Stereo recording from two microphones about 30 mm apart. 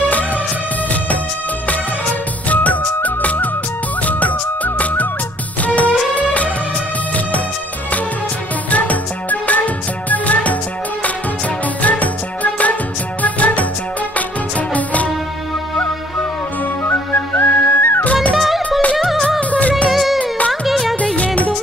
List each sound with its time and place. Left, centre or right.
2.5 s music: left
8.6 s music: left
11.8 s music: left
13.2 s music: left
14.7 s music: left
16.8 s music: left
18.4 s music: centre